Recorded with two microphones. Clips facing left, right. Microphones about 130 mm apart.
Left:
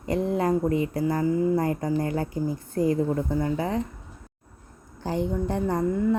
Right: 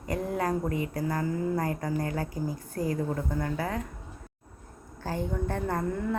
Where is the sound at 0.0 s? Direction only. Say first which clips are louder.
Left 5 dB; 25° left (ahead or behind).